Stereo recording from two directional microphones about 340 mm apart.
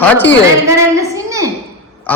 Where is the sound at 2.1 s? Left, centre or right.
Centre.